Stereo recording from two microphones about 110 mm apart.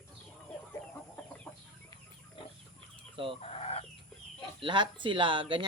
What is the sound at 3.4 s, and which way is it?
Chicken, 65° left (ahead or behind).